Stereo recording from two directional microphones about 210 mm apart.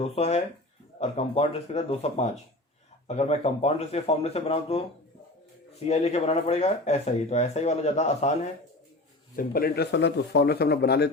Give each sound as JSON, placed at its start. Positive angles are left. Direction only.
{"t": 0.0, "sound": "speech", "side_deg": 30}
{"t": 5.8, "sound": "speech", "side_deg": 30}
{"t": 9.3, "sound": "speech", "side_deg": 40}